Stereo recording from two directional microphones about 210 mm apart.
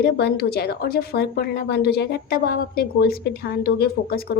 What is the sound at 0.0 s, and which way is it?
A woman's voice, 50° left (ahead or behind).